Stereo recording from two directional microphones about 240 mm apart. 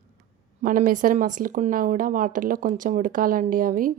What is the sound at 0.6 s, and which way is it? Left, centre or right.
Speech, right.